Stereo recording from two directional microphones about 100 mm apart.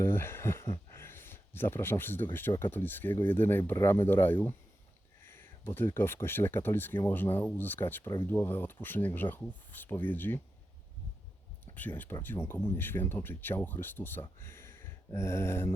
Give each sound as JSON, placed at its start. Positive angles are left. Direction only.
{"t": 0.0, "sound": "speech", "side_deg": 25}
{"t": 11.6, "sound": "speech", "side_deg": 15}